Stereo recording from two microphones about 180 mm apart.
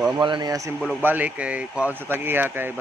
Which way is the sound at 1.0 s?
10° right (ahead or behind).